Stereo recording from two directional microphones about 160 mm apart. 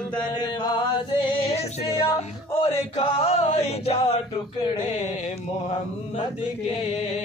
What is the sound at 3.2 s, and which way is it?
Mantra, 40° left (ahead or behind).